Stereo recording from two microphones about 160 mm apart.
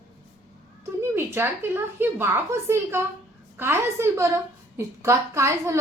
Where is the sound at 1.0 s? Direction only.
15° right (ahead or behind).